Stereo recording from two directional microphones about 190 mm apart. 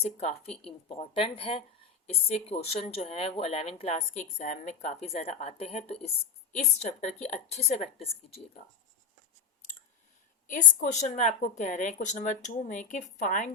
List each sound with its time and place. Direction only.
0.0 s a woman's voice: 35° left (ahead or behind)
10.5 s a woman's voice: 40° left (ahead or behind)